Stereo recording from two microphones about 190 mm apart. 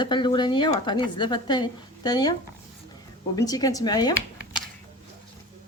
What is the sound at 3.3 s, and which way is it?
Speech, 20° left (ahead or behind).